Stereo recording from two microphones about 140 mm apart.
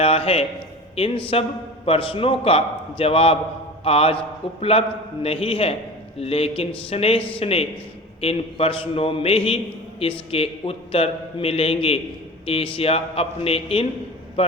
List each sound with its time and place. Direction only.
0.0 s a man's voice: 40° left (ahead or behind)